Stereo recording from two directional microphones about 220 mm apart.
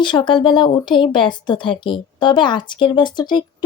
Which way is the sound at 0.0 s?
20° left (ahead or behind).